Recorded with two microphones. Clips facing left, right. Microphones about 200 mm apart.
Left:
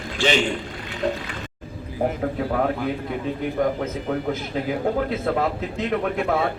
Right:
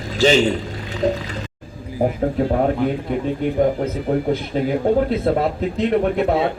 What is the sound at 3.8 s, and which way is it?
A man's voice, 35° right (ahead or behind).